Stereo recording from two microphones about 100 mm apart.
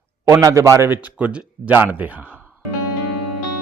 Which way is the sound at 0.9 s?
15° right (ahead or behind).